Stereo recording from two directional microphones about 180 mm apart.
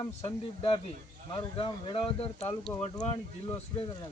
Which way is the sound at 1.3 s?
30° left (ahead or behind).